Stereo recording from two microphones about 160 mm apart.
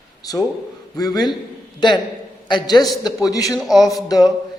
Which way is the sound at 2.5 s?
25° left (ahead or behind).